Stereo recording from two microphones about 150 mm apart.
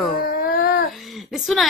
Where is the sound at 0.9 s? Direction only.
Centre (ahead or behind).